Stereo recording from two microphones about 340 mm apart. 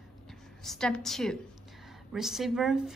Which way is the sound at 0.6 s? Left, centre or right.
Centre.